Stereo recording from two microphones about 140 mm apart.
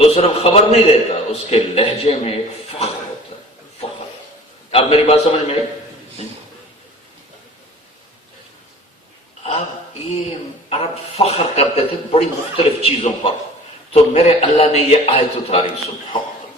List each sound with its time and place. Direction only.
0.0 s a man's voice: 45° left (ahead or behind)
4.7 s a man's voice: 45° left (ahead or behind)
10.7 s a man's voice: 45° left (ahead or behind)